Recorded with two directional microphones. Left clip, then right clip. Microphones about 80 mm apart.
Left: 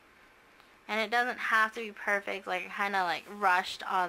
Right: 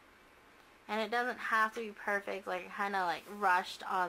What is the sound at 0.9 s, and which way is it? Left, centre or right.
Speech, left.